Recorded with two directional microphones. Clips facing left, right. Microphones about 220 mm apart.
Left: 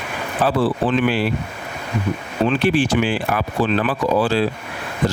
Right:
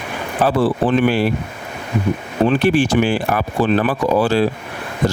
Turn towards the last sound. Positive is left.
turn(degrees=-45)  # may be behind; listen again after turning